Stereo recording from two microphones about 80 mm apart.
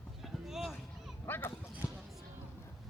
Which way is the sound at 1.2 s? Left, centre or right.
Left.